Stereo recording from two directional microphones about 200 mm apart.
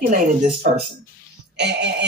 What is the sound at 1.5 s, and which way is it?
Music, 60° right (ahead or behind).